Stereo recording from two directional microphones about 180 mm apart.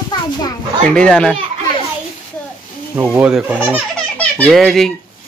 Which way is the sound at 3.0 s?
10° right (ahead or behind).